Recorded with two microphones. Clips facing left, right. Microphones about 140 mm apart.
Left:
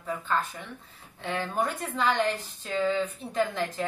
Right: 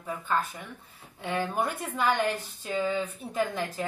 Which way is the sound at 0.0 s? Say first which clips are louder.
Even; 10° right (ahead or behind).